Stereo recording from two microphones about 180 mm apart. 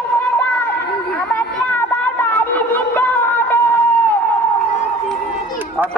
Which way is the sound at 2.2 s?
10° left (ahead or behind).